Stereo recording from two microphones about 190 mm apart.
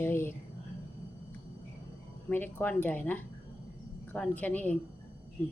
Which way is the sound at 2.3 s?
10° left (ahead or behind).